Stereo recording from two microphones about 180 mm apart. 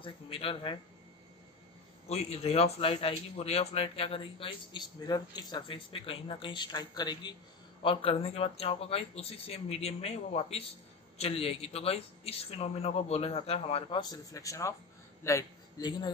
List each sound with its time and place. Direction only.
0.0 s speech: 30° left (ahead or behind)
2.0 s a man's voice: 35° left (ahead or behind)